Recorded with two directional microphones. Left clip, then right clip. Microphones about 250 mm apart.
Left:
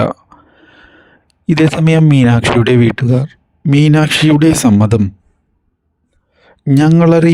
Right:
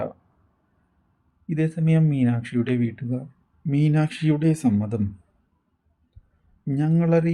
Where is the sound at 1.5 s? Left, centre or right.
Left.